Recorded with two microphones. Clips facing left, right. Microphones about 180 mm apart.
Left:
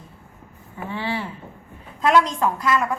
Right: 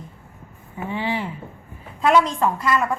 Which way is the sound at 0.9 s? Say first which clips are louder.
Right 2 dB; 15° right (ahead or behind).